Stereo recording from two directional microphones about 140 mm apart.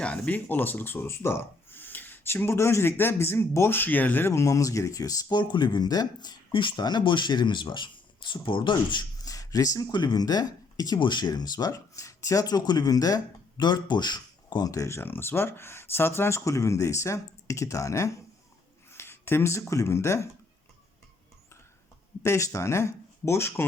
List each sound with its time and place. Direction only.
0.0 s speech: 10° left (ahead or behind)
22.2 s speech: 20° left (ahead or behind)